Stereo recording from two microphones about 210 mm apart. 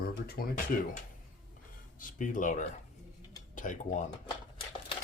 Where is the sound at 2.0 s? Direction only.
40° left (ahead or behind).